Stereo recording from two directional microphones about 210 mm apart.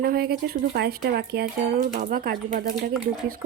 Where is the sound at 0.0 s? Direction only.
45° right (ahead or behind).